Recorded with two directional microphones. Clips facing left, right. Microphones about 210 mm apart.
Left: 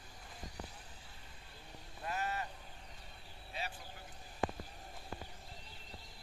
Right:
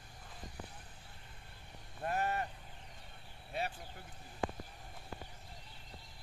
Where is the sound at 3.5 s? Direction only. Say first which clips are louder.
Right 5 dB; 55° right (ahead or behind).